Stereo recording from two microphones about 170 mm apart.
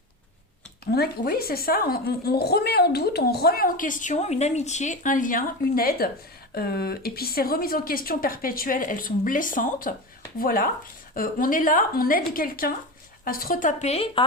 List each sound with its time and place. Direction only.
0.9 s a woman's voice: 60° left (ahead or behind); by 14.3 s 35° left (ahead or behind)